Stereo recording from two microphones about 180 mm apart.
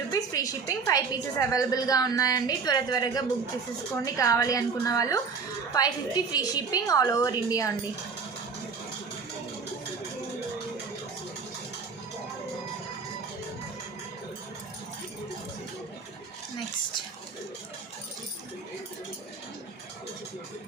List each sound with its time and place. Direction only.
0.1 s a woman's voice: 20° left (ahead or behind)